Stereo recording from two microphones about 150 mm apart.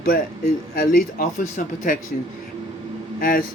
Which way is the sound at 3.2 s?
70° left (ahead or behind).